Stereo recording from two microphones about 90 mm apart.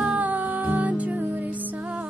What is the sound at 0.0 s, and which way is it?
Music, 15° right (ahead or behind).